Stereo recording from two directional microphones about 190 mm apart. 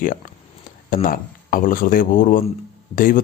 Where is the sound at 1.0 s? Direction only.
45° left (ahead or behind).